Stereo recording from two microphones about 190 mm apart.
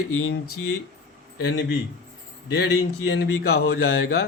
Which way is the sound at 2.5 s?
65° left (ahead or behind).